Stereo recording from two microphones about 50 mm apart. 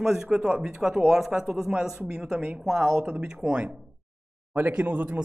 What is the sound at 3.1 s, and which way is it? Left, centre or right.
A man's voice, right.